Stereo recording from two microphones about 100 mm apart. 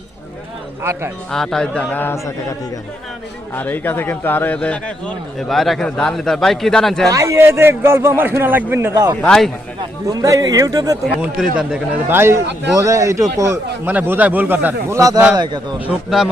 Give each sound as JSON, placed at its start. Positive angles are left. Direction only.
{"t": 0.8, "sound": "a man's voice", "side_deg": -25}
{"t": 1.3, "sound": "a man's voice", "side_deg": 5}
{"t": 3.5, "sound": "a man's voice", "side_deg": 20}
{"t": 7.1, "sound": "a man's voice", "side_deg": -30}
{"t": 9.2, "sound": "a man's voice", "side_deg": 10}
{"t": 10.1, "sound": "speech", "side_deg": -35}
{"t": 11.2, "sound": "speech", "side_deg": -5}
{"t": 12.0, "sound": "a man's voice", "side_deg": -25}
{"t": 12.7, "sound": "speech", "side_deg": -35}
{"t": 13.8, "sound": "a man's voice", "side_deg": -15}
{"t": 14.9, "sound": "speech", "side_deg": -35}
{"t": 15.9, "sound": "speech", "side_deg": -5}